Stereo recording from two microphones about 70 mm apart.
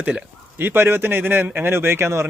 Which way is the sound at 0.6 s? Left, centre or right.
Right.